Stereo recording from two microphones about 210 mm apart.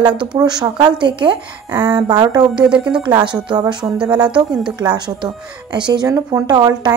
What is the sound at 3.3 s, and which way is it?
Speech, 20° right (ahead or behind).